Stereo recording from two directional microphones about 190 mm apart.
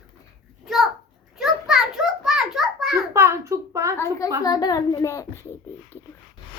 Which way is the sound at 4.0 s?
15° left (ahead or behind).